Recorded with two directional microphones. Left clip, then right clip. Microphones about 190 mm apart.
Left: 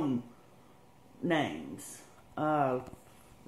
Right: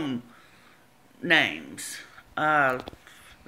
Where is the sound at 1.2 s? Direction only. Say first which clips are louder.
Right 10 dB; 5° right (ahead or behind).